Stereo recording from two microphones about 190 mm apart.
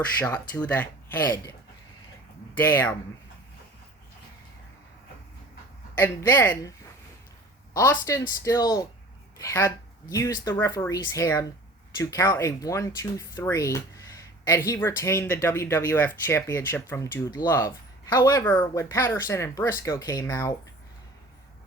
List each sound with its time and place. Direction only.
0.2 s speech: 10° left (ahead or behind)
2.6 s speech: 10° left (ahead or behind)
6.0 s speech: 10° left (ahead or behind)